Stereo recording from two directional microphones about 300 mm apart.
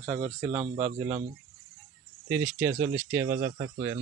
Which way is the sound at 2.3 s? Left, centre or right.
Centre.